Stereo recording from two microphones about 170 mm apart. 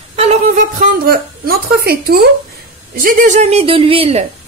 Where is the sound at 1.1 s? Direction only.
65° right (ahead or behind).